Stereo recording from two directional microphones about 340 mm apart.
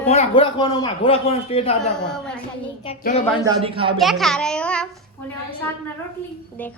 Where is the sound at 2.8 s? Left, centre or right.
Left.